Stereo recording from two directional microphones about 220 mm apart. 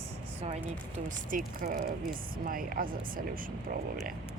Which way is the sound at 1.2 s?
40° right (ahead or behind).